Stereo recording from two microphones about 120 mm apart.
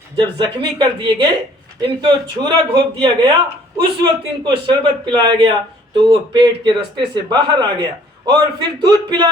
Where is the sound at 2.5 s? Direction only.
45° right (ahead or behind).